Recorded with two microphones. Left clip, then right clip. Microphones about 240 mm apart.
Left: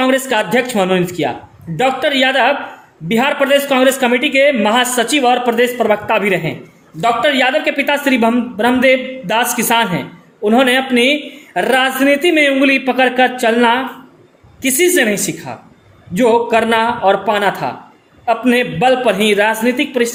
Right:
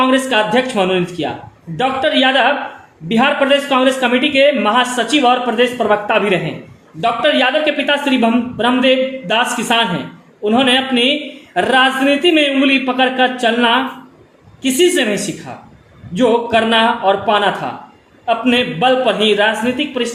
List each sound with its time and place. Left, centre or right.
0.0 s a man's voice: left